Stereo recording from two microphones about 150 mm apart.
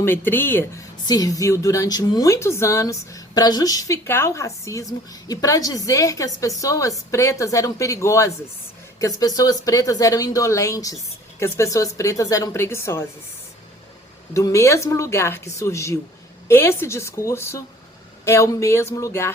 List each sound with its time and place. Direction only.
0.0 s a woman's voice: 15° left (ahead or behind)
14.3 s a woman's voice: 20° left (ahead or behind)